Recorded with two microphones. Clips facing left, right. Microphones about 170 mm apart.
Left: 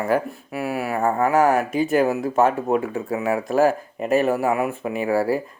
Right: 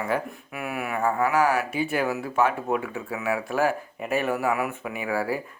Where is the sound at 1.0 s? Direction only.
45° left (ahead or behind).